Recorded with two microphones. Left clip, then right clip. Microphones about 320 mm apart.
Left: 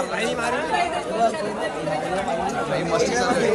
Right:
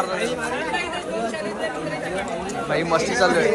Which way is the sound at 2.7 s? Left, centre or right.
Centre.